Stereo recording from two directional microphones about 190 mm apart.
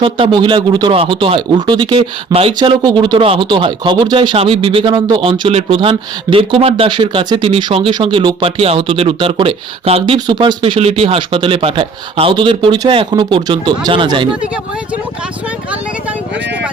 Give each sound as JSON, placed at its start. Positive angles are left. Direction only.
{"t": 0.0, "sound": "speech", "side_deg": -25}